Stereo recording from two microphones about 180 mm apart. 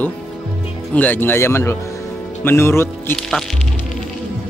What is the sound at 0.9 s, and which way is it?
A man's voice, 10° left (ahead or behind).